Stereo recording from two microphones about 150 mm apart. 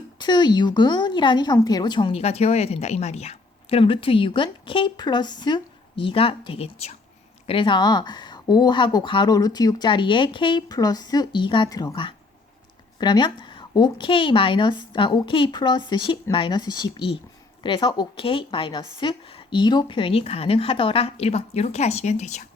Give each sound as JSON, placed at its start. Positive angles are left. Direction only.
{"t": 0.2, "sound": "speech", "side_deg": 30}